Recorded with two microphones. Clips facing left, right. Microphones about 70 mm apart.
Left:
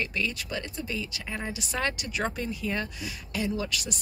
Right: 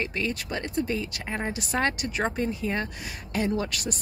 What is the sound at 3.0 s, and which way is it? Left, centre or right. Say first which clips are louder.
Speech: right 3 dB; right.